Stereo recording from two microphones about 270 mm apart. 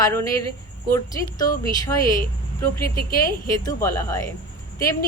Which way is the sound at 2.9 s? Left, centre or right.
Left.